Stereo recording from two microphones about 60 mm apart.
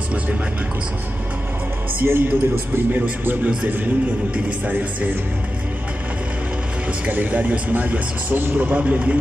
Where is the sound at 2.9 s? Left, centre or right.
Right.